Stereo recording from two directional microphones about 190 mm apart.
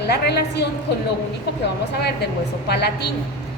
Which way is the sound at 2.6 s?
60° left (ahead or behind).